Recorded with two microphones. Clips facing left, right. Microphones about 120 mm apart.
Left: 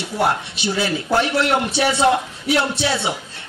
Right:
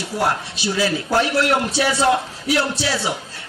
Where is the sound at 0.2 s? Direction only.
25° left (ahead or behind).